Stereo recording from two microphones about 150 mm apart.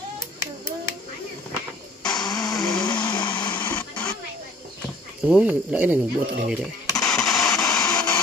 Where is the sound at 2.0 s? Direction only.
25° left (ahead or behind).